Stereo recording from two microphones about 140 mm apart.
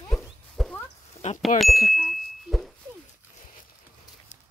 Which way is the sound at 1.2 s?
50° left (ahead or behind).